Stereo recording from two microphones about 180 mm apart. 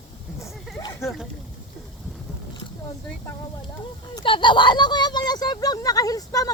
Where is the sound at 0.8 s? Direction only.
15° left (ahead or behind).